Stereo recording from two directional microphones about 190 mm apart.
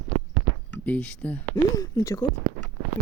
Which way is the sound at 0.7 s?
5° left (ahead or behind).